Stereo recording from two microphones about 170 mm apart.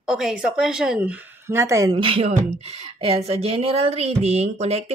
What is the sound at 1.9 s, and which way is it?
Speech, 35° right (ahead or behind).